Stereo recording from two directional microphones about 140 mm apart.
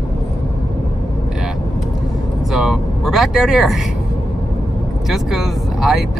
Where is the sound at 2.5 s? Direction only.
Centre (ahead or behind).